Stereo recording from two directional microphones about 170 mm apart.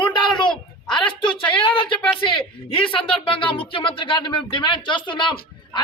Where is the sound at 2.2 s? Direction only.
30° left (ahead or behind).